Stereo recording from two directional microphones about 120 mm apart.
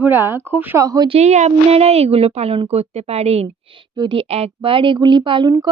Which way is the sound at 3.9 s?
45° right (ahead or behind).